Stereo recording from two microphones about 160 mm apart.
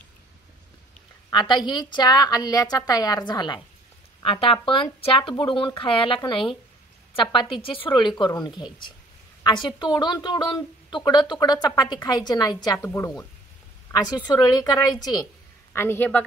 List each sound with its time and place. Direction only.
1.3 s a woman's voice: 30° left (ahead or behind)
14.1 s a woman's voice: 25° left (ahead or behind)
15.7 s a woman's voice: 15° left (ahead or behind)